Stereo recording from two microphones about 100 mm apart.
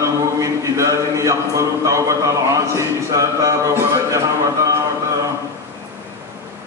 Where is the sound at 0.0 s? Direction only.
30° right (ahead or behind).